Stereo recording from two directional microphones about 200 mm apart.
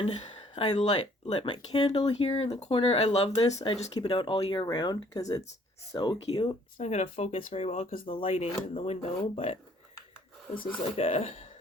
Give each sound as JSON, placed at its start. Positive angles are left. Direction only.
{"t": 0.0, "sound": "speech", "side_deg": 30}
{"t": 10.8, "sound": "speech", "side_deg": 30}